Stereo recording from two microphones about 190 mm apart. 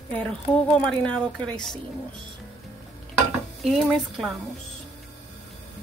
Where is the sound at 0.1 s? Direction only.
5° left (ahead or behind).